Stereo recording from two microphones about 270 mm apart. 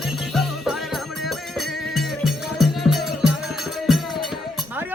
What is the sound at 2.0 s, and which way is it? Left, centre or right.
Music, centre.